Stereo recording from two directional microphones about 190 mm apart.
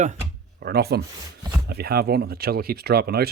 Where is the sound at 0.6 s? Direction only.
55° right (ahead or behind).